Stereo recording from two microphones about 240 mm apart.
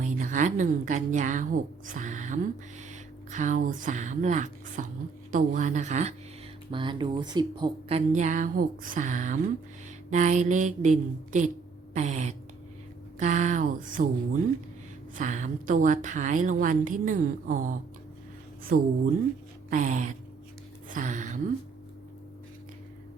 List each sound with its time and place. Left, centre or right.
0.0 s a woman's voice: right
15.1 s a woman's voice: right